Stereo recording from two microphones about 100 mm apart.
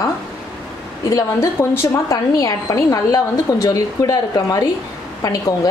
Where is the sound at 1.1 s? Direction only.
30° left (ahead or behind).